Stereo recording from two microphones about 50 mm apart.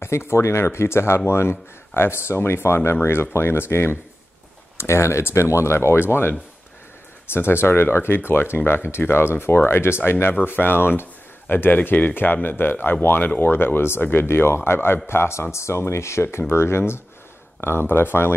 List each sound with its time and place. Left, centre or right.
0.0 s speech: left
4.7 s speech: left
7.3 s speech: left
15.5 s speech: left